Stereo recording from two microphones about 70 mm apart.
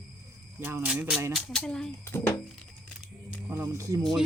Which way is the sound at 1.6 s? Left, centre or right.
Centre.